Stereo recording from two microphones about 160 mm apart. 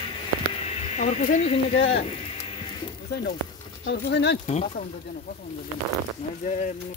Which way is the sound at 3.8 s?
90° left.